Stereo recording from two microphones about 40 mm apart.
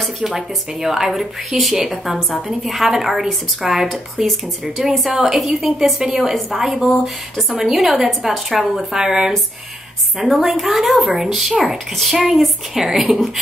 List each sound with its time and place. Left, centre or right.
0.0 s a sound: centre
0.8 s a woman's voice: centre
4.8 s a woman's voice: right
5.1 s a woman's voice: centre